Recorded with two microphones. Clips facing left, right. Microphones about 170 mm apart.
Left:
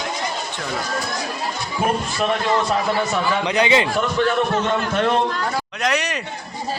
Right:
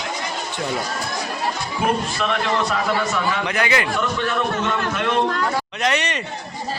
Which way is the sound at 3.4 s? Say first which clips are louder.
Left 4 dB; 20° left (ahead or behind).